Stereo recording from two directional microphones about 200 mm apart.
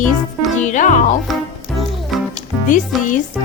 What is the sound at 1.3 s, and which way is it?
Speech, centre (ahead or behind).